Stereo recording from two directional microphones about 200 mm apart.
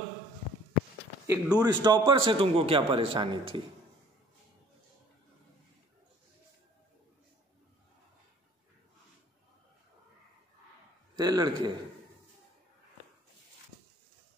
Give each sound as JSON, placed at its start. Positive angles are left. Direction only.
{"t": 1.2, "sound": "a man's voice", "side_deg": -15}
{"t": 11.1, "sound": "a man's voice", "side_deg": -20}